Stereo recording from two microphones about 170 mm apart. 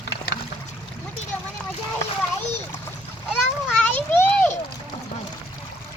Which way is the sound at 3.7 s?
10° left (ahead or behind).